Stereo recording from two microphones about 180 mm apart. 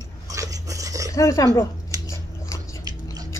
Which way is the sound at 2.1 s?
15° left (ahead or behind).